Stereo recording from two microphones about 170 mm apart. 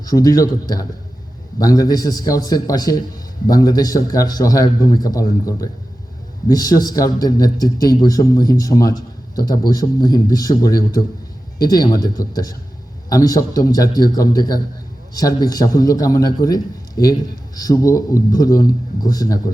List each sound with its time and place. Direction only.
0.0 s a man's voice: 20° left (ahead or behind)